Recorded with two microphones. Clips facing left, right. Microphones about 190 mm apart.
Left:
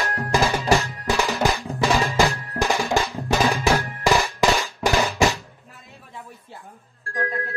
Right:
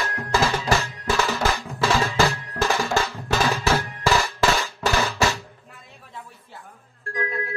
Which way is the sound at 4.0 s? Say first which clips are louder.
Left 2 dB; 15° left (ahead or behind).